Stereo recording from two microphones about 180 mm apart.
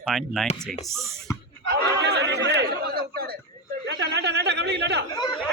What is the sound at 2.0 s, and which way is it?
Chatter, 70° right (ahead or behind).